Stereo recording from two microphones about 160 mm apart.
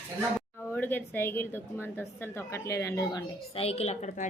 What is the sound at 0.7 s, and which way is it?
A woman's voice, 10° left (ahead or behind).